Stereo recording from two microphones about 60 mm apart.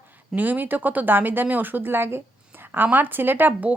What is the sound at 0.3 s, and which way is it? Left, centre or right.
Speech, right.